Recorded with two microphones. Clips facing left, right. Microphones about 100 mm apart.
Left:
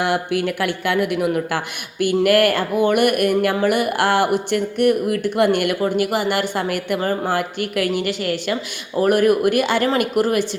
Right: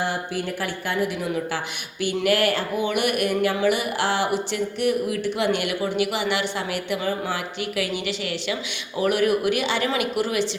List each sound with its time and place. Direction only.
0.0 s speech: 70° left (ahead or behind); by 10.4 s 50° left (ahead or behind)